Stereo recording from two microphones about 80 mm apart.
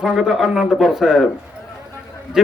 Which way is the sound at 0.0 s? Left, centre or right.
Centre.